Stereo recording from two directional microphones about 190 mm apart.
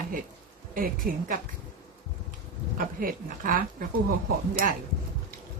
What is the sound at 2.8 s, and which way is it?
Speech, 45° right (ahead or behind).